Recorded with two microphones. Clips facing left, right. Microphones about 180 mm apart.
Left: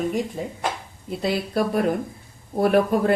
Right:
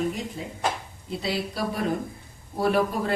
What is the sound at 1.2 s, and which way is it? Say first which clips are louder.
Speech: left 6 dB; 55° left (ahead or behind).